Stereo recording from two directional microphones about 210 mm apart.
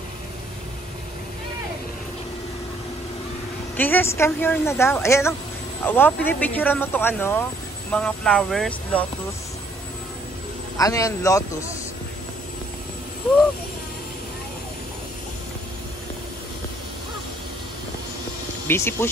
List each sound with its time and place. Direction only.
3.7 s speech: 10° left (ahead or behind)
10.8 s speech: 15° left (ahead or behind)
18.7 s speech: 10° left (ahead or behind)